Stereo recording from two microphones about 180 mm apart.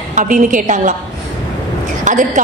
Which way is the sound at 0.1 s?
45° right (ahead or behind).